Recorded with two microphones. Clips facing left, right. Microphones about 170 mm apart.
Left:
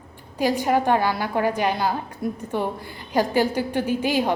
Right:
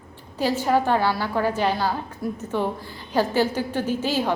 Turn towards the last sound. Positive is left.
turn(degrees=10)  # may be behind; listen again after turning